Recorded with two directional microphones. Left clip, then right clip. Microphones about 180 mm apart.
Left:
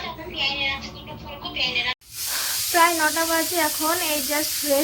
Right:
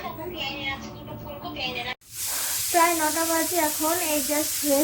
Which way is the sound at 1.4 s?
20° right (ahead or behind).